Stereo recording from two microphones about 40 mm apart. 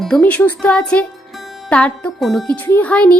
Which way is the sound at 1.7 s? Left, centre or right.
Left.